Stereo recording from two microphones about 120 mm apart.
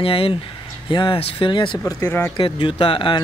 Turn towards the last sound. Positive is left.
turn(degrees=45)  # may be behind; listen again after turning